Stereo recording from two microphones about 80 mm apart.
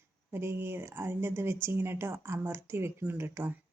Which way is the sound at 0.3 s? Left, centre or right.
Right.